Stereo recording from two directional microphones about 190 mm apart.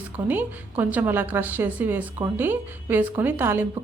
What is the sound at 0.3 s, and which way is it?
A woman's voice, 10° right (ahead or behind).